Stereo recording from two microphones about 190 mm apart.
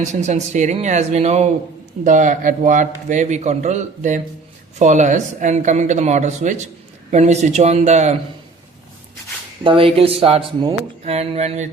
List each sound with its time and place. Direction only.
0.0 s a man's voice: 40° right (ahead or behind)
9.6 s a man's voice: 30° right (ahead or behind)